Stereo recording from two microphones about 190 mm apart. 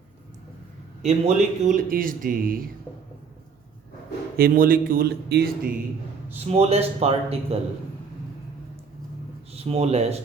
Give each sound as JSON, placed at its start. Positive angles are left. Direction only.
{"t": 1.0, "sound": "speech", "side_deg": -35}
{"t": 4.4, "sound": "speech", "side_deg": -50}
{"t": 6.3, "sound": "a man's voice", "side_deg": -35}
{"t": 9.5, "sound": "speech", "side_deg": -30}